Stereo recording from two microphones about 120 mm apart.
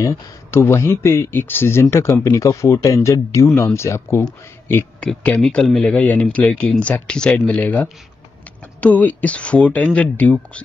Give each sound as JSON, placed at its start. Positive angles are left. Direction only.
{"t": 0.0, "sound": "speech", "side_deg": 25}
{"t": 5.0, "sound": "speech", "side_deg": 5}